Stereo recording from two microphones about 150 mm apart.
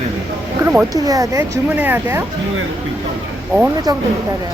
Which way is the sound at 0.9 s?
25° right (ahead or behind).